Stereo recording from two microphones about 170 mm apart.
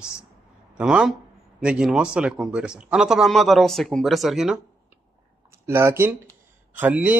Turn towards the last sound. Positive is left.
turn(degrees=-10)  # may be behind; listen again after turning